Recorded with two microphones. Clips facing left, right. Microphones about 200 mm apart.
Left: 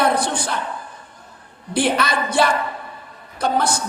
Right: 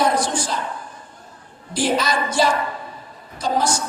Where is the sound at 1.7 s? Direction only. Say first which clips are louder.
Left 1 dB; 60° left (ahead or behind).